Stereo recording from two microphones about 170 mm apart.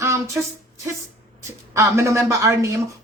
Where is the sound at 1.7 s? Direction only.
15° right (ahead or behind).